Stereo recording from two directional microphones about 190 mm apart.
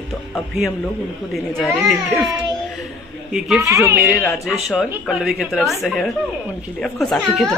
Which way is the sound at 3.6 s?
15° right (ahead or behind).